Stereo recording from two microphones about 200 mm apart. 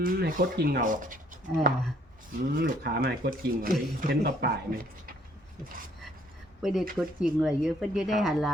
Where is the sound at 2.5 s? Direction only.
50° right (ahead or behind).